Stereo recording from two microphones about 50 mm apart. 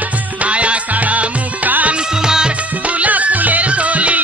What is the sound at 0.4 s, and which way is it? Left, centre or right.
Music, right.